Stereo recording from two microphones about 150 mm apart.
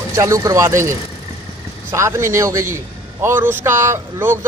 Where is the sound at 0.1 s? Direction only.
20° right (ahead or behind).